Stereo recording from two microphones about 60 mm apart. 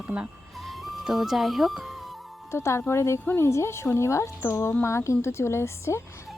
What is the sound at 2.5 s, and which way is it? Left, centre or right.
A woman's voice, left.